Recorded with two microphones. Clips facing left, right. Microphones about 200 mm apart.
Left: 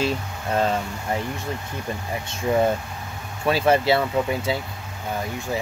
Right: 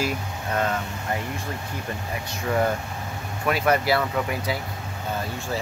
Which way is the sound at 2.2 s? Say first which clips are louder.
Left 3 dB; 20° left (ahead or behind).